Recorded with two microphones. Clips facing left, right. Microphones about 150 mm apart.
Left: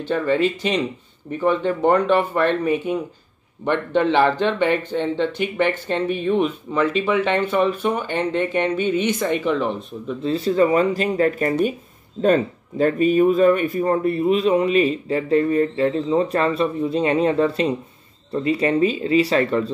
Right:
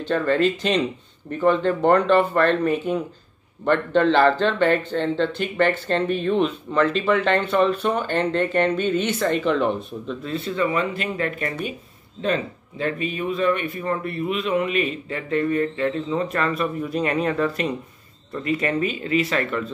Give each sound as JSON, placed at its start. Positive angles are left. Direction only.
{"t": 0.0, "sound": "speech", "side_deg": 10}
{"t": 10.2, "sound": "speech", "side_deg": 35}